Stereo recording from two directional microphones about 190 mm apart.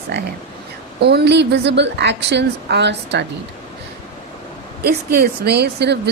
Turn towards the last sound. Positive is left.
turn(degrees=-60)  # may be behind; listen again after turning